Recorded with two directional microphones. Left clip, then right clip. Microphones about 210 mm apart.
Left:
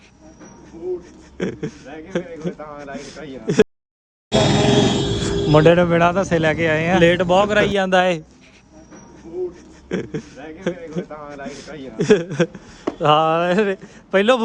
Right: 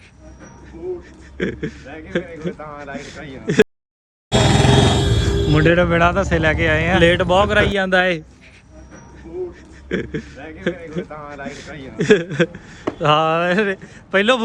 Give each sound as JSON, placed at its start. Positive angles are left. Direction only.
{"t": 1.4, "sound": "a man's voice", "side_deg": 15}
{"t": 2.6, "sound": "a man's voice", "side_deg": 5}
{"t": 4.3, "sound": "grunt", "side_deg": -5}
{"t": 5.5, "sound": "speech", "side_deg": 25}
{"t": 5.7, "sound": "speech", "side_deg": 5}
{"t": 7.9, "sound": "a man's voice", "side_deg": 15}
{"t": 9.9, "sound": "a man's voice", "side_deg": 15}